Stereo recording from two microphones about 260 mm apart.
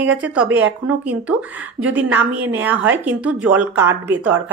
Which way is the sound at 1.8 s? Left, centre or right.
Centre.